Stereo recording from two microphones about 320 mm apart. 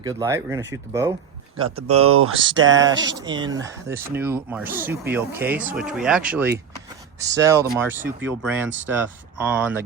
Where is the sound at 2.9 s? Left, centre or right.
Centre.